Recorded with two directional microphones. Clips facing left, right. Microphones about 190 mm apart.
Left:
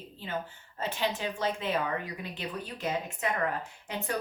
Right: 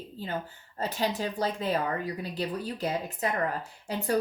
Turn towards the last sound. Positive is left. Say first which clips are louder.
# right 5 dB
turn(degrees=-35)  # may be behind; listen again after turning